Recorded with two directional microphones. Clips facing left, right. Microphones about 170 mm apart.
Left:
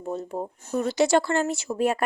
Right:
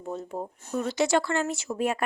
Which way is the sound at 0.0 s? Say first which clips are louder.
Left 3 dB; 35° left (ahead or behind).